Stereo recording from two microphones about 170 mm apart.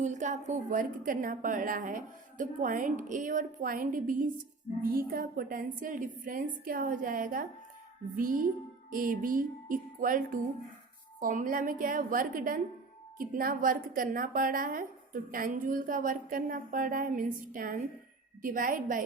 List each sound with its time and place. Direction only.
0.0 s a woman's voice: 45° right (ahead or behind)